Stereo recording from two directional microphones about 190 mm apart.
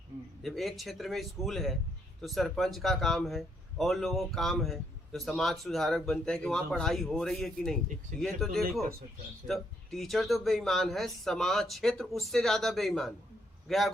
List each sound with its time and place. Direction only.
0.4 s a man's voice: centre (ahead or behind)